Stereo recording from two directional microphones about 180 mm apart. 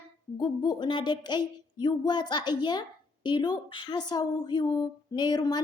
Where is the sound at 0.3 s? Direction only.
25° left (ahead or behind).